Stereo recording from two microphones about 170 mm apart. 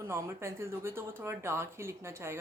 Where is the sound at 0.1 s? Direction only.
15° right (ahead or behind).